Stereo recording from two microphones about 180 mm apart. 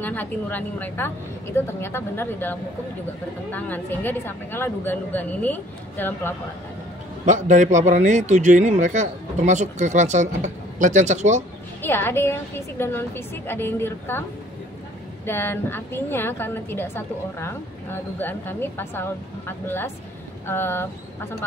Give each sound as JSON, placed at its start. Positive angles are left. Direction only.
{"t": 0.0, "sound": "a woman's voice", "side_deg": 10}
{"t": 7.2, "sound": "a man's voice", "side_deg": -45}
{"t": 11.8, "sound": "a woman's voice", "side_deg": 10}
{"t": 15.2, "sound": "a woman's voice", "side_deg": 10}